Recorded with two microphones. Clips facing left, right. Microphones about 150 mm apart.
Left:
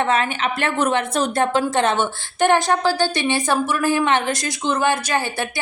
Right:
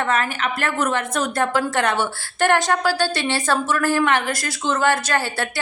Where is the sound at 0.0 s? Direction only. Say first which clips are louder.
Left 2 dB; 25° left (ahead or behind).